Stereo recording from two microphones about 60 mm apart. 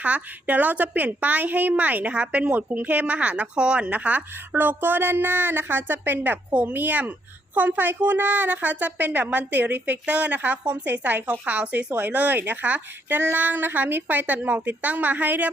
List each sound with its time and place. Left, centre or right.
0.0 s a woman's voice: right